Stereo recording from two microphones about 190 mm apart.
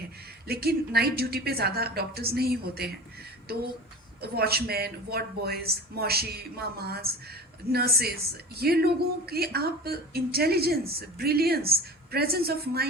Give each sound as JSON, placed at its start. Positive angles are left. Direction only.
{"t": 0.4, "sound": "speech", "side_deg": -55}
{"t": 4.2, "sound": "speech", "side_deg": -55}